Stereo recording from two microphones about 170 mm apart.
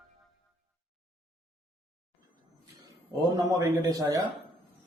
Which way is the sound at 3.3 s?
20° right (ahead or behind).